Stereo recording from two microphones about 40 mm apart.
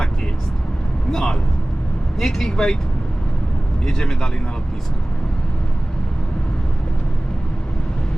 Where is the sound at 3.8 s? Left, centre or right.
Centre.